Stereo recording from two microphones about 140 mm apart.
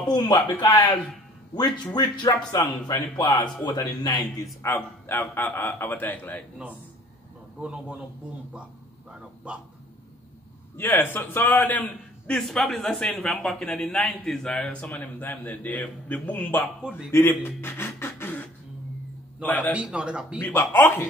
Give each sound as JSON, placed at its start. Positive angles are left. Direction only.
{"t": 0.1, "sound": "speech", "side_deg": 30}
{"t": 2.0, "sound": "a man's voice", "side_deg": 30}
{"t": 4.6, "sound": "a man's voice", "side_deg": 20}
{"t": 7.6, "sound": "speech", "side_deg": -10}
{"t": 9.1, "sound": "speech", "side_deg": -10}
{"t": 10.8, "sound": "a man's voice", "side_deg": 15}
{"t": 19.7, "sound": "speech", "side_deg": -5}
{"t": 20.3, "sound": "a man's voice", "side_deg": 10}